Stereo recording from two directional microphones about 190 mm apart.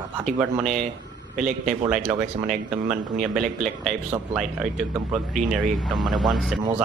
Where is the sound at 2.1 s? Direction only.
40° right (ahead or behind).